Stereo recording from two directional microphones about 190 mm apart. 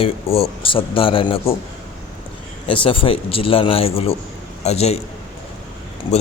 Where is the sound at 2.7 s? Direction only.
25° left (ahead or behind).